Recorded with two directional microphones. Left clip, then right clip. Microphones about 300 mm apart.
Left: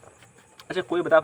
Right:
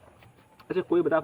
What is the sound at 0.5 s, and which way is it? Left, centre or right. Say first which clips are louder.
Speech: right 1 dB; centre.